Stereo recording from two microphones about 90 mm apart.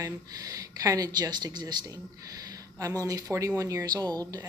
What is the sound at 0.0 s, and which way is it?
Speech, 40° right (ahead or behind).